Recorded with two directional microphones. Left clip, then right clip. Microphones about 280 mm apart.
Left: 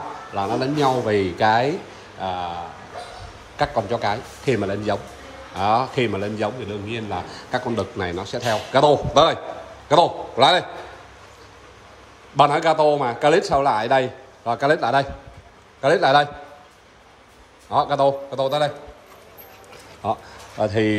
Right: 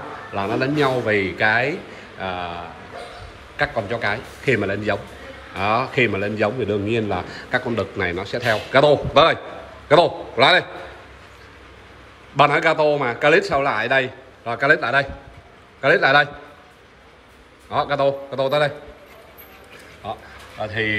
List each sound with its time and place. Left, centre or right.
0.3 s a man's voice: centre
12.4 s a man's voice: centre
17.6 s a man's voice: centre
20.0 s speech: left